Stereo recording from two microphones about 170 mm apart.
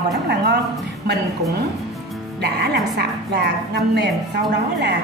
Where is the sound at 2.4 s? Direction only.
75° right (ahead or behind).